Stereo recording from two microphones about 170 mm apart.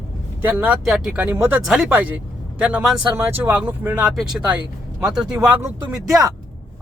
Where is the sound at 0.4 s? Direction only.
10° right (ahead or behind).